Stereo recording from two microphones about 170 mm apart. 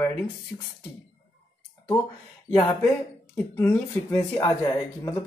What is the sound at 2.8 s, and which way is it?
Speech, 10° left (ahead or behind).